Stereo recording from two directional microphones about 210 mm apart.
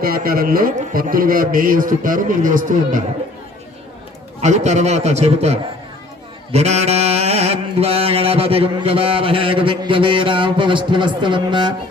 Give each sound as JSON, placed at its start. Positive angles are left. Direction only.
{"t": 0.0, "sound": "a man's voice", "side_deg": -45}
{"t": 4.4, "sound": "a man's voice", "side_deg": -35}
{"t": 6.5, "sound": "mantra", "side_deg": -30}